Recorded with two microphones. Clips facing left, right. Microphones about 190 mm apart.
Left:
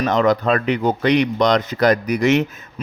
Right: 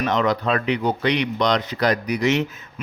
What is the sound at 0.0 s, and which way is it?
A man's voice, 45° left (ahead or behind).